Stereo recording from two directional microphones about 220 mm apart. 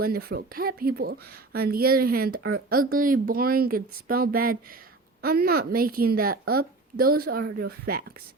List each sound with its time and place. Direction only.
0.0 s speech: 45° right (ahead or behind)